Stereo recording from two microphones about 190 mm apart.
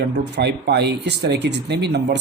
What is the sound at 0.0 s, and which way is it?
Speech, 60° right (ahead or behind).